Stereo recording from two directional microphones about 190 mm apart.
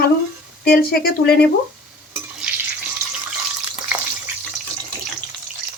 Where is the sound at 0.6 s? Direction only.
50° left (ahead or behind).